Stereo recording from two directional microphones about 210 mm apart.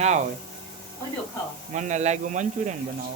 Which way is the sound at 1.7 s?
35° right (ahead or behind).